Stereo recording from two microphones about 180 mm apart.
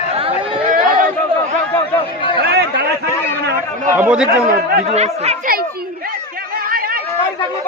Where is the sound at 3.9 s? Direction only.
10° right (ahead or behind).